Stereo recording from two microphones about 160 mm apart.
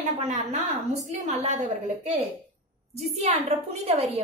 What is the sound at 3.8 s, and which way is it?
Speech, 40° right (ahead or behind).